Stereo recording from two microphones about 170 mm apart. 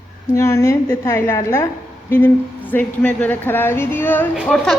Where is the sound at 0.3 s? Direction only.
15° left (ahead or behind).